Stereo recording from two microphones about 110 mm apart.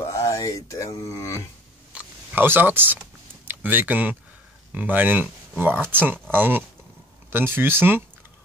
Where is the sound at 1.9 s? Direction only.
20° right (ahead or behind).